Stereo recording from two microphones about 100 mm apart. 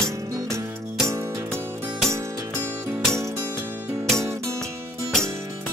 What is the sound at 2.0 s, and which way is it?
Music, 25° right (ahead or behind).